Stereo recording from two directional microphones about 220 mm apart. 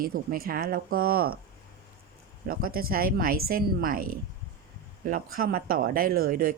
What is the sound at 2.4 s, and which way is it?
Speech, 40° right (ahead or behind).